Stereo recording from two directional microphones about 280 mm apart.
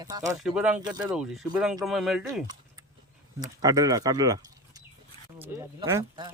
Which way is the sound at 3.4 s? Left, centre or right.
Centre.